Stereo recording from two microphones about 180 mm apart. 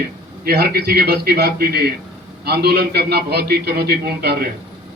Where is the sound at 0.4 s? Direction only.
55° right (ahead or behind).